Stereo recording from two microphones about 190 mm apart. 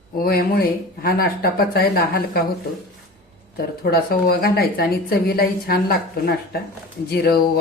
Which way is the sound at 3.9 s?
55° left (ahead or behind).